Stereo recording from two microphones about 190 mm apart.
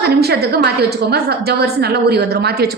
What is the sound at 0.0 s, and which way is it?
A woman's voice, 55° right (ahead or behind).